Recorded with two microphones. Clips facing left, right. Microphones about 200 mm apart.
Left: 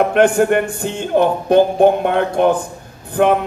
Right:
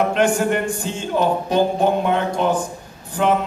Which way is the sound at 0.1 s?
60° left (ahead or behind).